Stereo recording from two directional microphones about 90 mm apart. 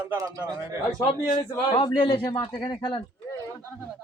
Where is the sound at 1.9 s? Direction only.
50° left (ahead or behind).